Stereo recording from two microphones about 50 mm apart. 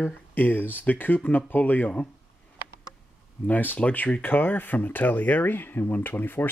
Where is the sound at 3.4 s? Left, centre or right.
Left.